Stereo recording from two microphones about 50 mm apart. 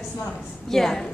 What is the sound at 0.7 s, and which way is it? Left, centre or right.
Speech, centre.